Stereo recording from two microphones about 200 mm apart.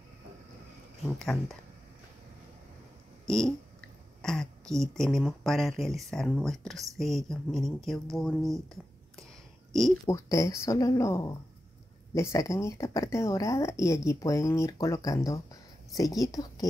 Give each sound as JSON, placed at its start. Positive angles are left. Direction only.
{"t": 1.2, "sound": "speech", "side_deg": 5}
{"t": 4.2, "sound": "speech", "side_deg": 5}
{"t": 9.7, "sound": "a sound", "side_deg": 0}
{"t": 10.0, "sound": "a woman's voice", "side_deg": 15}